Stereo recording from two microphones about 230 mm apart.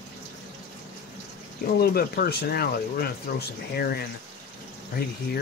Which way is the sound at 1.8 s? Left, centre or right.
Left.